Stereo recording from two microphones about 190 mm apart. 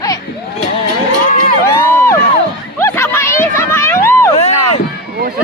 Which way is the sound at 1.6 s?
15° left (ahead or behind).